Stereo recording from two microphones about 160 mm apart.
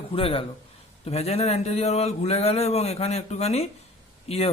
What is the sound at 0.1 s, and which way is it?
Speech, 35° left (ahead or behind).